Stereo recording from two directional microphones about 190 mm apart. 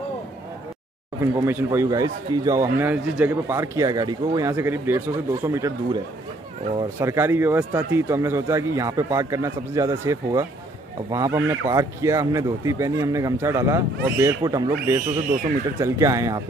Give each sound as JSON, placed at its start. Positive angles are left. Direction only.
{"t": 1.2, "sound": "speech", "side_deg": -15}
{"t": 7.0, "sound": "speech", "side_deg": -15}